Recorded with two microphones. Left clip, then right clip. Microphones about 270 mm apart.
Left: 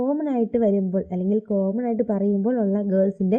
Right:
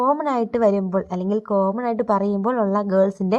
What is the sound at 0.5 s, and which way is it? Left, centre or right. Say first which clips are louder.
Speech: right 3 dB; right.